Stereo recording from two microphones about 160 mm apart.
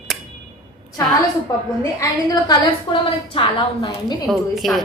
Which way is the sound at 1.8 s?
20° left (ahead or behind).